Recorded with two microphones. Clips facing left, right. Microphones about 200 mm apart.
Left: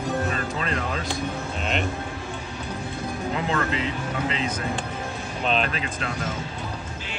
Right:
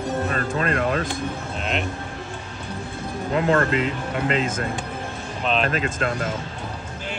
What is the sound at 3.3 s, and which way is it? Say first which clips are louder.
Speech: right 7 dB; 50° right (ahead or behind).